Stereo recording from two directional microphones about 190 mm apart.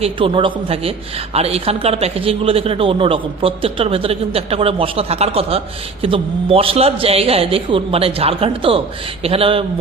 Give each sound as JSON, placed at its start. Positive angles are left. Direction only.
{"t": 0.0, "sound": "a woman's voice", "side_deg": -30}